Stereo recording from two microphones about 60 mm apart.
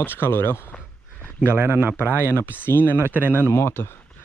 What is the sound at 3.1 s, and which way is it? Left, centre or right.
Speech, right.